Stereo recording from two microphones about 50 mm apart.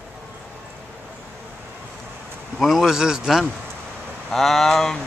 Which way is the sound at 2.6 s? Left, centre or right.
Centre.